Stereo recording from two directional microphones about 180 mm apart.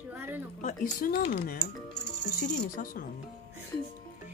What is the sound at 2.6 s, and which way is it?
Speech, 50° left (ahead or behind).